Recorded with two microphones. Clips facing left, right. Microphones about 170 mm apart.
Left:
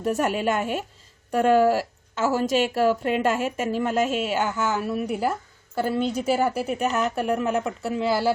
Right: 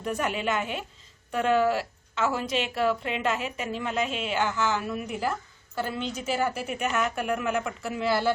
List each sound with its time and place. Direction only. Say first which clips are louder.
0.0 s a woman's voice: left 5 dB; 45° left (ahead or behind)
4.9 s a woman's voice: left 5 dB; 35° left (ahead or behind)